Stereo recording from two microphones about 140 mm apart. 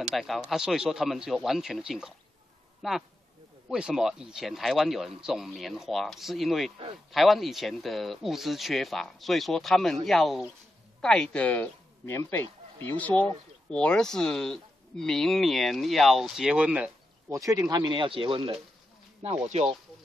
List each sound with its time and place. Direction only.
0.0 s speech: centre (ahead or behind)
17.3 s speech: 25° right (ahead or behind); by 18.6 s 40° right (ahead or behind)
19.2 s speech: 50° right (ahead or behind)